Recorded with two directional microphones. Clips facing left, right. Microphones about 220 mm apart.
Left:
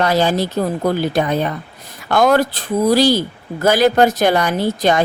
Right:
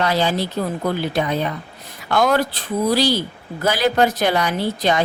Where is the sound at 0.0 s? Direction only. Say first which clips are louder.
Left 4 dB; 45° left (ahead or behind).